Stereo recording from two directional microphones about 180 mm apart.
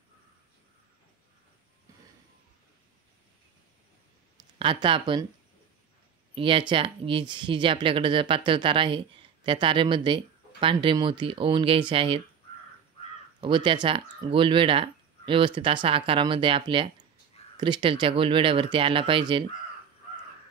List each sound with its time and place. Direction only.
4.6 s speech: 30° right (ahead or behind)
6.3 s speech: 30° right (ahead or behind)
13.4 s speech: 25° right (ahead or behind)